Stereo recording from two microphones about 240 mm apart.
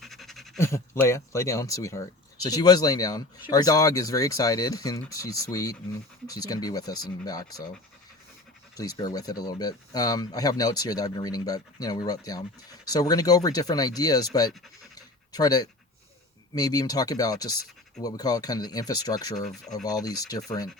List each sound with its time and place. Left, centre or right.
0.0 s pant: centre
0.7 s speech: centre
8.7 s speech: centre
14.9 s pant: centre
16.6 s speech: centre
19.5 s speech: centre
19.8 s speech: centre